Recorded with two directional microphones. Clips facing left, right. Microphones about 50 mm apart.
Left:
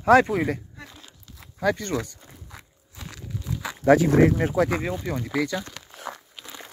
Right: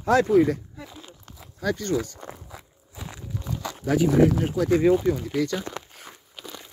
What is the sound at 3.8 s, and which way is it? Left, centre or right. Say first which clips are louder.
Speech: left 3 dB; left.